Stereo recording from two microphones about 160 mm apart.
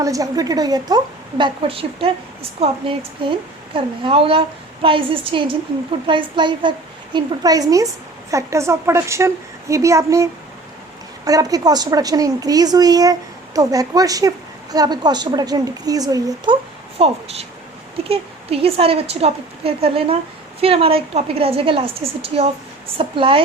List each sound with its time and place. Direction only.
0.0 s a woman's voice: 20° right (ahead or behind)
11.3 s a woman's voice: 20° right (ahead or behind)
17.0 s a woman's voice: 40° right (ahead or behind)